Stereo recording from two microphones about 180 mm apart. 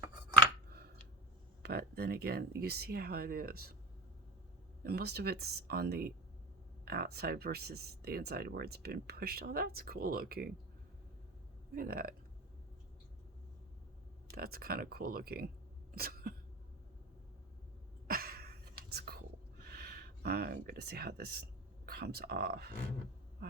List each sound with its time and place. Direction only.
1.6 s a sound: 60° right (ahead or behind)
2.6 s speech: 60° right (ahead or behind)
4.8 s speech: 60° right (ahead or behind)
11.7 s speech: 55° right (ahead or behind)
14.3 s speech: 55° right (ahead or behind)
16.0 s cough: 55° right (ahead or behind)
18.1 s a sound: 55° right (ahead or behind)
18.9 s whispering: 60° right (ahead or behind)
19.6 s a sound: 60° right (ahead or behind)
21.8 s speech: 60° right (ahead or behind)